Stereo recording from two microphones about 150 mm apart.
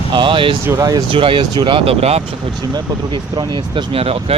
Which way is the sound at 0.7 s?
25° right (ahead or behind).